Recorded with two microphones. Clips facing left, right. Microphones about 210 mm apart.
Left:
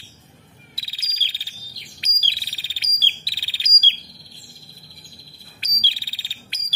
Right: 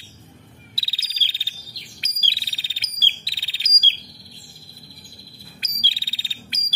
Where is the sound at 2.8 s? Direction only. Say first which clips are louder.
Even; 50° right (ahead or behind).